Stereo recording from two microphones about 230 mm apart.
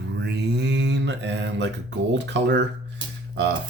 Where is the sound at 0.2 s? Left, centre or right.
Right.